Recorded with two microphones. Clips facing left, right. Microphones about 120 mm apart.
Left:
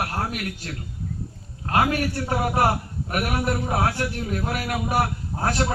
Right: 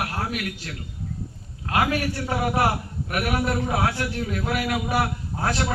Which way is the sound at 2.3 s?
40° left (ahead or behind).